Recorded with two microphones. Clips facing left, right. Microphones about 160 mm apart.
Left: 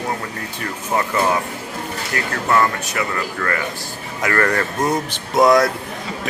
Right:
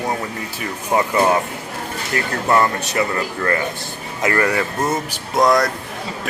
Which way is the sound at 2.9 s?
25° right (ahead or behind).